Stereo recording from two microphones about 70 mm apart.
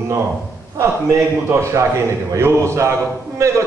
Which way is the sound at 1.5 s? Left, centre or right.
Right.